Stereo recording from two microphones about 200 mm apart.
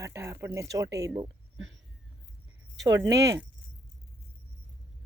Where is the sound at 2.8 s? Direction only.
20° right (ahead or behind).